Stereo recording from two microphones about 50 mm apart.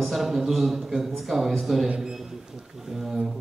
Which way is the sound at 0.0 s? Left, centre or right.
Centre.